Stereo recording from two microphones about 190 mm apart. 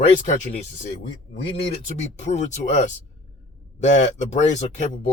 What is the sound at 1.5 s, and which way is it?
Speech, 35° left (ahead or behind).